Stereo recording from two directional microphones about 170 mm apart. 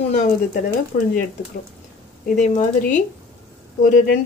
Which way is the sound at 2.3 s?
45° left (ahead or behind).